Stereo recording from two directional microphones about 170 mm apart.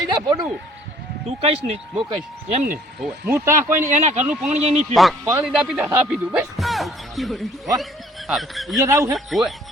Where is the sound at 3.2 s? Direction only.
15° right (ahead or behind).